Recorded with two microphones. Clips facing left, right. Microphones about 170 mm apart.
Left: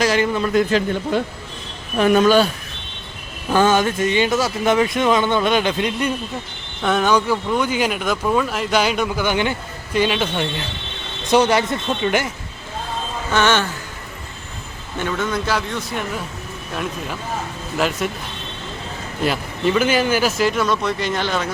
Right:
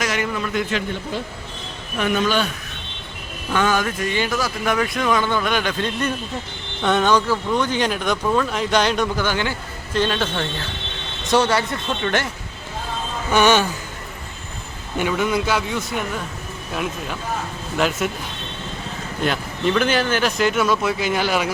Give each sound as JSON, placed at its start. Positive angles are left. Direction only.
{"t": 0.0, "sound": "a man's voice", "side_deg": 30}
{"t": 2.0, "sound": "speech", "side_deg": 40}
{"t": 3.5, "sound": "speech", "side_deg": 30}
{"t": 13.3, "sound": "speech", "side_deg": -15}
{"t": 14.9, "sound": "speech", "side_deg": -10}
{"t": 19.2, "sound": "speech", "side_deg": 5}